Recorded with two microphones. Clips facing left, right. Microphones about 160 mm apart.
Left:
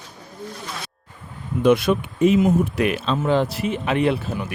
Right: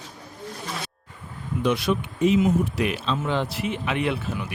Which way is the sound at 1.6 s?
55° left (ahead or behind).